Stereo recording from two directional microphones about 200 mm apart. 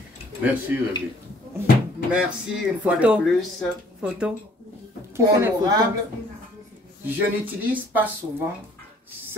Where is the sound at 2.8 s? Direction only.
5° right (ahead or behind).